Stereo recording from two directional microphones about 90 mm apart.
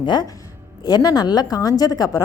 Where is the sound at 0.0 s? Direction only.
55° left (ahead or behind).